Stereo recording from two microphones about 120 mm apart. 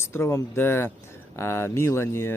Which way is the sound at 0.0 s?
20° left (ahead or behind).